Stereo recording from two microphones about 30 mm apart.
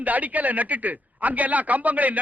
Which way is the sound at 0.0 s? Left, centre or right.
Right.